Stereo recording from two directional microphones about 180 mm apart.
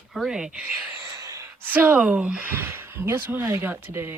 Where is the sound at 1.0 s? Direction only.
20° right (ahead or behind).